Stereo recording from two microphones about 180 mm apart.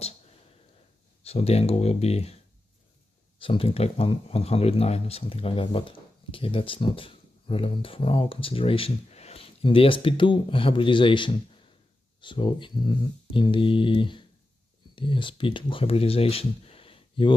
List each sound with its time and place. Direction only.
1.2 s speech: 35° left (ahead or behind)
3.3 s speech: 30° left (ahead or behind)